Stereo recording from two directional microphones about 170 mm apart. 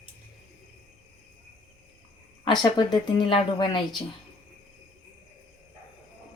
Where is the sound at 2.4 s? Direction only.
25° left (ahead or behind).